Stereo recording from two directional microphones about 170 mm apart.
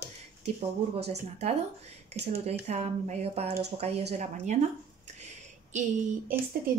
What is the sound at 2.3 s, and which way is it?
A woman's voice, 40° right (ahead or behind).